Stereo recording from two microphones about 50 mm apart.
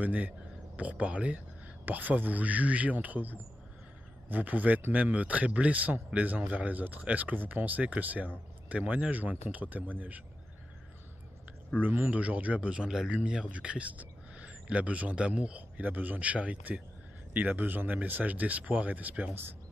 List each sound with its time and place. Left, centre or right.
0.0 s speech: right
1.9 s speech: right
11.8 s speech: right
12.2 s speech: right
15.8 s speech: right